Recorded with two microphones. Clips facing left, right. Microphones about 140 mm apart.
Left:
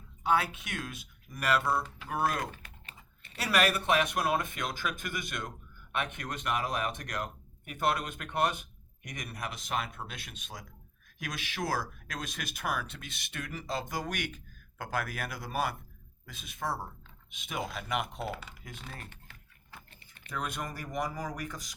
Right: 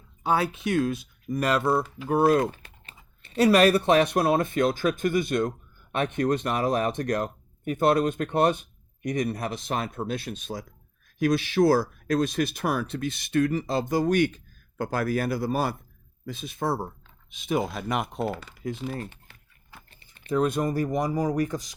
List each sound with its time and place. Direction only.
0.2 s speech: 35° right (ahead or behind)
20.1 s speech: 30° right (ahead or behind)